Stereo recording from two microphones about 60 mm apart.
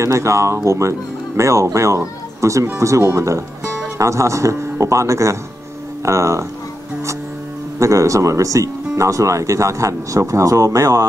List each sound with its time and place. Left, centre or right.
0.0 s speech: right
7.8 s speech: right